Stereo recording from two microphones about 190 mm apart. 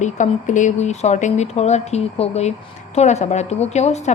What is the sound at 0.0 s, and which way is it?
Speech, 40° left (ahead or behind).